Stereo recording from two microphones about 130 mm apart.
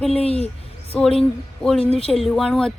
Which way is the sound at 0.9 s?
5° left (ahead or behind).